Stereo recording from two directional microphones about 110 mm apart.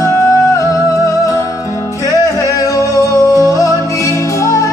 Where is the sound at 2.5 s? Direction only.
30° left (ahead or behind).